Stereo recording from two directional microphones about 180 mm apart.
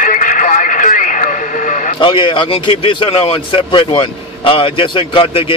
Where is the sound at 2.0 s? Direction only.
25° left (ahead or behind).